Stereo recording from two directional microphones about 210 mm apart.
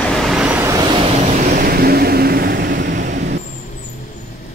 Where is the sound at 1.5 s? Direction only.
45° right (ahead or behind).